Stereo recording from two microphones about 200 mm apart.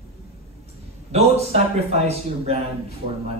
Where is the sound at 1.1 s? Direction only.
30° right (ahead or behind).